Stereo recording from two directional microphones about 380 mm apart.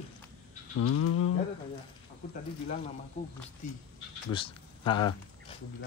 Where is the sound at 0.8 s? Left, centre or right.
Left.